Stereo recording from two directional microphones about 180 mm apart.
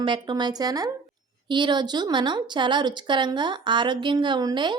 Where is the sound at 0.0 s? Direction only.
25° right (ahead or behind).